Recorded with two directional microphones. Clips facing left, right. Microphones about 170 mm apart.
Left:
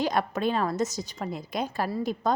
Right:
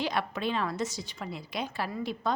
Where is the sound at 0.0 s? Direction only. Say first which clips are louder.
Left 5 dB; 45° left (ahead or behind).